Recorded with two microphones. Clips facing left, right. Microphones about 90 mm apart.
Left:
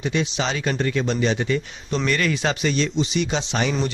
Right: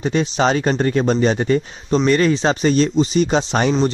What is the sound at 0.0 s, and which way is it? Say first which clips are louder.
Speech: right 6 dB; 40° right (ahead or behind).